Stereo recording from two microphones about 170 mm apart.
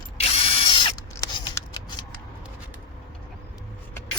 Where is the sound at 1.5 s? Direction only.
25° left (ahead or behind).